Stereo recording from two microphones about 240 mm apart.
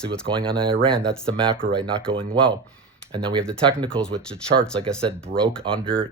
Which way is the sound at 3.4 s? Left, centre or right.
Centre.